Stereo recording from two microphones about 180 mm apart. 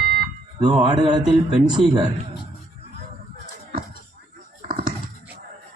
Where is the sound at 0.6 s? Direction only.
25° right (ahead or behind).